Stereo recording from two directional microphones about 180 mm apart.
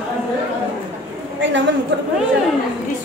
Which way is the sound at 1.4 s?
90° right.